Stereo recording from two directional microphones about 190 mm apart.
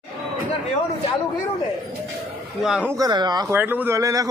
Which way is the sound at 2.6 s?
Centre (ahead or behind).